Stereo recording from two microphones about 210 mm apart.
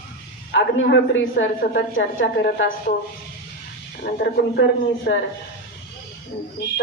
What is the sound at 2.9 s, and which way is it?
Speech, 40° left (ahead or behind).